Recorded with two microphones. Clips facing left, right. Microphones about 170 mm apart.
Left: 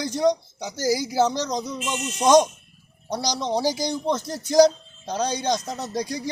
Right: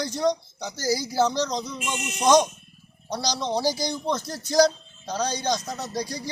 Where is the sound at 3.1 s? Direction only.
20° left (ahead or behind).